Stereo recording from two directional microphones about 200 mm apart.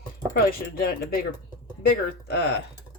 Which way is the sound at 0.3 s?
50° left (ahead or behind).